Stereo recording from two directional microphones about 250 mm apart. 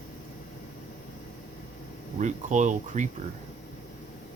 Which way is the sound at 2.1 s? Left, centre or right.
Right.